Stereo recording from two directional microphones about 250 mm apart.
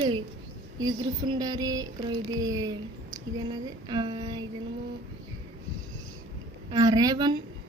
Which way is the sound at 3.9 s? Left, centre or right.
Centre.